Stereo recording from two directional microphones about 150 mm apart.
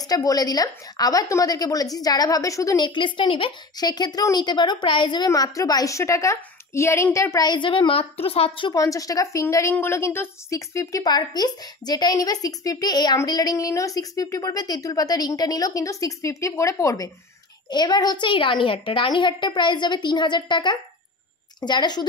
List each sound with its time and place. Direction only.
0.1 s a woman's voice: 25° left (ahead or behind)
8.7 s a woman's voice: 20° left (ahead or behind)